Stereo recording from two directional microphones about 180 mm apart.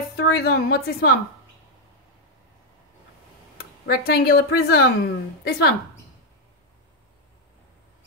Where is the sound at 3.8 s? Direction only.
60° left (ahead or behind).